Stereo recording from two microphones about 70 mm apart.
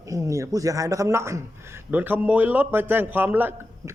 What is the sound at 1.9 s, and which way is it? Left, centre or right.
A man's voice, right.